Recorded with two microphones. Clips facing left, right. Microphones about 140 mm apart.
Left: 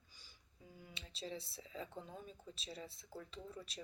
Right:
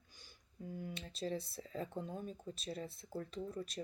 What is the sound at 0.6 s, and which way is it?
Speech, 55° right (ahead or behind).